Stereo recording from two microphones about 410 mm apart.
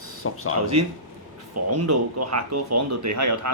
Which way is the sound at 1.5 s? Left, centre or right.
Right.